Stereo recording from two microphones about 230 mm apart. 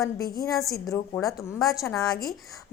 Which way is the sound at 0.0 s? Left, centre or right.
Centre.